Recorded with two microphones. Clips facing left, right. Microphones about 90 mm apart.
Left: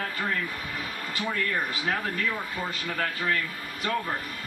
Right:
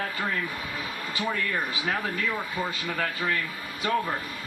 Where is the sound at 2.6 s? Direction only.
10° right (ahead or behind).